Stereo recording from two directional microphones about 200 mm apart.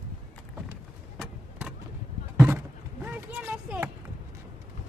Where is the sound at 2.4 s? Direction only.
10° right (ahead or behind).